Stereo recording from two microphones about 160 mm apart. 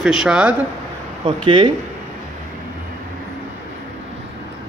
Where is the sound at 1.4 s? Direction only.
30° right (ahead or behind).